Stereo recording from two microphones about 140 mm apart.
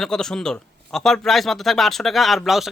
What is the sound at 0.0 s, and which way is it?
Speech, 5° left (ahead or behind).